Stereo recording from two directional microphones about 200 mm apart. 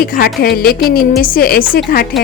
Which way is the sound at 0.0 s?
50° left (ahead or behind).